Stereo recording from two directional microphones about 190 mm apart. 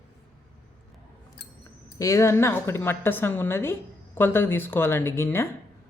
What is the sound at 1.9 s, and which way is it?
Speech, 15° left (ahead or behind).